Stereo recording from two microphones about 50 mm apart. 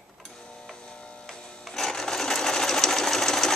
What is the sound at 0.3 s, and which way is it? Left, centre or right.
Printer, centre.